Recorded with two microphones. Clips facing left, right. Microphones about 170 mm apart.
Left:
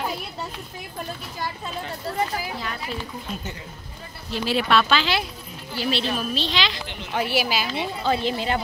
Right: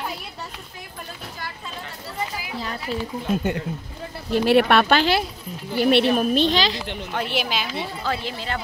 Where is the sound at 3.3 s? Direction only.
60° right (ahead or behind).